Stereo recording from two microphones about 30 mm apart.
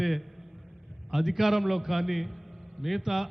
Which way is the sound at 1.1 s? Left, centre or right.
Centre.